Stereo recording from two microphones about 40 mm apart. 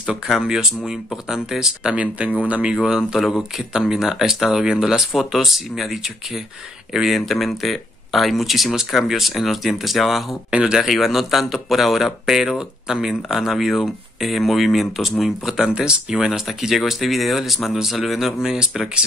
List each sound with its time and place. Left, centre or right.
0.4 s speech: centre
2.0 s speech: right
2.8 s speech: centre
3.3 s speech: centre
3.7 s speech: centre
5.1 s speech: centre
10.5 s speech: right
10.9 s speech: centre
16.3 s speech: centre
18.5 s speech: centre